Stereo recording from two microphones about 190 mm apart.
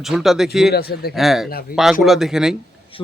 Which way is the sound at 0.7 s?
55° left (ahead or behind).